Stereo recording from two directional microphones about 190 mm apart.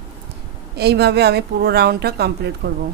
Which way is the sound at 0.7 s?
60° right (ahead or behind).